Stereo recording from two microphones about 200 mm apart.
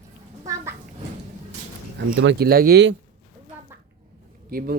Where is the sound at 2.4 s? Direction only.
50° right (ahead or behind).